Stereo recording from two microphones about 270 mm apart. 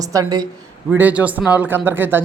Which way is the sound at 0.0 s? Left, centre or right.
Centre.